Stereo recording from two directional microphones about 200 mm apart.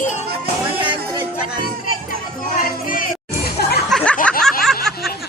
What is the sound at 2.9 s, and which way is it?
Music, 50° left (ahead or behind).